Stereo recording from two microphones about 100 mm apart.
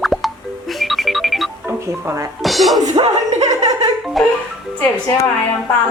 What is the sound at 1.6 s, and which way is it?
Music, 25° right (ahead or behind).